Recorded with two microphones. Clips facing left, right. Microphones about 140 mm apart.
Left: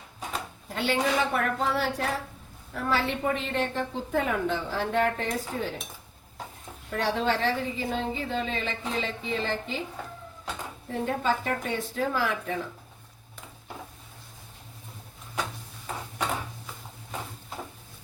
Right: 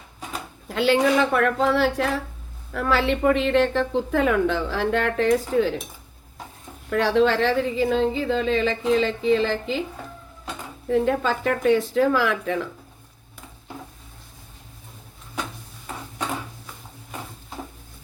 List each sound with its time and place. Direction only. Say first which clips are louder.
0.7 s a woman's voice: right 7 dB; 90° right
6.9 s a woman's voice: right 8 dB; 90° right
11.0 s a woman's voice: right 5 dB; 90° right